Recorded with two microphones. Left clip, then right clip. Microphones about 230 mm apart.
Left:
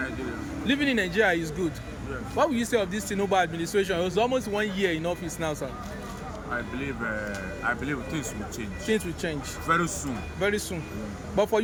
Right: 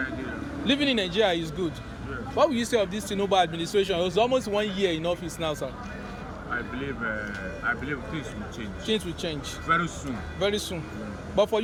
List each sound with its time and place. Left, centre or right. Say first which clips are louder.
0.6 s speech: right 1 dB; centre
6.7 s speech: even; centre